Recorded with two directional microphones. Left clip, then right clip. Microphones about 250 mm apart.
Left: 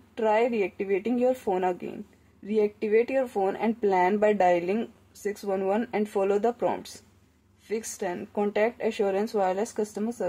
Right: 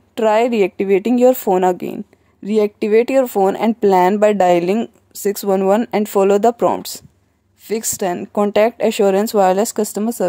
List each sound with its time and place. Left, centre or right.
0.1 s speech: right